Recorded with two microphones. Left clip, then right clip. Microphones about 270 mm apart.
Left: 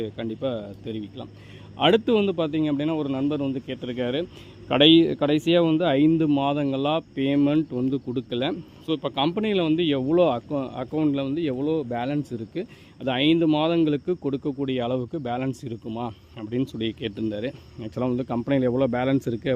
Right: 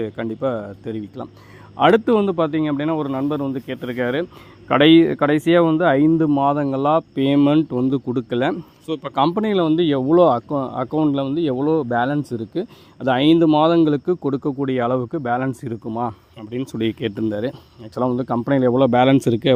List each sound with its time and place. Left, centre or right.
0.0 s a man's voice: centre; by 19.5 s right